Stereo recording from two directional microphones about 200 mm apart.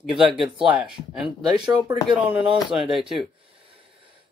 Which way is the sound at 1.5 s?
20° right (ahead or behind).